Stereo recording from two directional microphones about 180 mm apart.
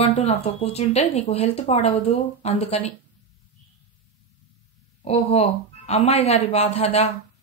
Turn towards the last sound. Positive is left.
turn(degrees=35)  # may be behind; listen again after turning